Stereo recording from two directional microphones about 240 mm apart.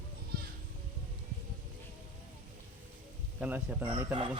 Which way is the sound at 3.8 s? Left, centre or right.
Centre.